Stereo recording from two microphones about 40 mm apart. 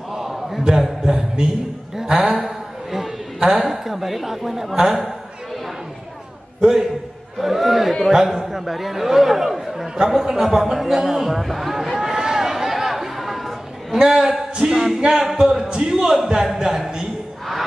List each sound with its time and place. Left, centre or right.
0.1 s a sound: centre
0.7 s a man's voice: centre
2.4 s a sound: centre
3.3 s a woman's voice: right
3.6 s speech: centre
4.7 s a man's voice: centre
6.6 s a man's voice: centre
7.3 s speech: centre
9.9 s a sound: centre
13.9 s a man's voice: centre